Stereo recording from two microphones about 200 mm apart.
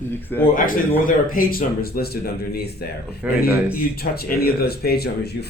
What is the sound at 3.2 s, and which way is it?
Speech, 10° right (ahead or behind).